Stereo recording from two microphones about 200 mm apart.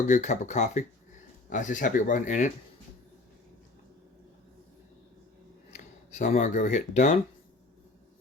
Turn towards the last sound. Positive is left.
turn(degrees=35)  # may be behind; listen again after turning